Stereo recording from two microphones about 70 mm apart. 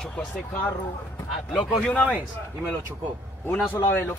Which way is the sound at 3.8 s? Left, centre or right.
Left.